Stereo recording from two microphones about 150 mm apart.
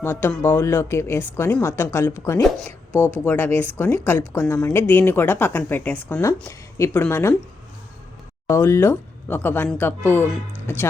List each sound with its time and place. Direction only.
0.0 s a woman's voice: 15° left (ahead or behind)
2.9 s speech: 15° right (ahead or behind)
3.2 s a woman's voice: 15° left (ahead or behind)
8.4 s a woman's voice: 20° left (ahead or behind)